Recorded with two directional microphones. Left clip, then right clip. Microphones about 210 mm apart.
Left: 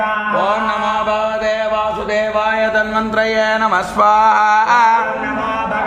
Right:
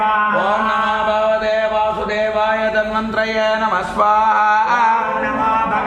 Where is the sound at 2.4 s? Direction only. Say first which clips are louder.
Left 1 dB; 40° left (ahead or behind).